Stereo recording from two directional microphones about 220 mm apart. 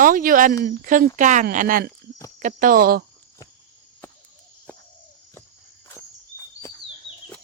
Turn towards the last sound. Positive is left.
turn(degrees=15)  # may be behind; listen again after turning